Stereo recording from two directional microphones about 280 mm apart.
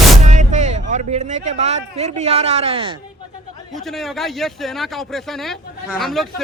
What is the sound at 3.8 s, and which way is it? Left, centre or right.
Speech, centre.